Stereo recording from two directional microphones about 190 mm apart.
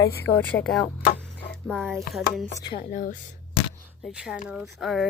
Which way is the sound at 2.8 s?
45° left (ahead or behind).